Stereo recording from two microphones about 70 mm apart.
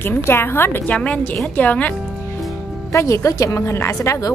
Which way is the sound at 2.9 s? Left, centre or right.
Left.